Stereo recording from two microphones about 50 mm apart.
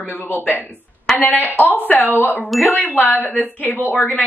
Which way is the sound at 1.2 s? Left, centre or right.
Left.